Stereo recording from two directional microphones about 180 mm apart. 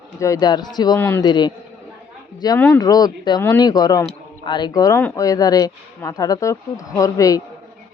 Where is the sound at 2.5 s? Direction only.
10° left (ahead or behind).